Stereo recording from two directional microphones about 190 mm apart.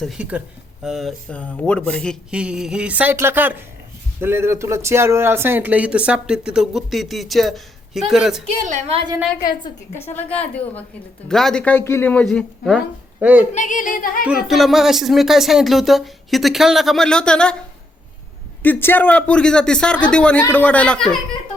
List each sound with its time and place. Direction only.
0.0 s speech: 5° right (ahead or behind)
8.4 s a woman's voice: 35° right (ahead or behind)
10.2 s speech: 10° left (ahead or behind)
13.1 s a child's voice: 10° right (ahead or behind)
13.5 s speech: 40° left (ahead or behind)
14.4 s speech: centre (ahead or behind)
18.6 s speech: 10° left (ahead or behind)